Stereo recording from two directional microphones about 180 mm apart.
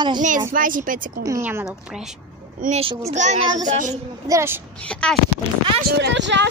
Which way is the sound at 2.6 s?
35° right (ahead or behind).